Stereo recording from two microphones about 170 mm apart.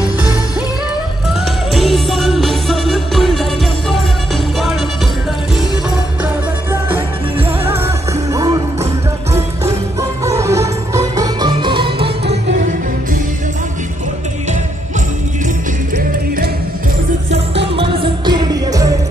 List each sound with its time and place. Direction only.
1.7 s music: centre (ahead or behind)
8.3 s music: 20° right (ahead or behind)
10.2 s music: 15° right (ahead or behind)
17.3 s music: 35° right (ahead or behind)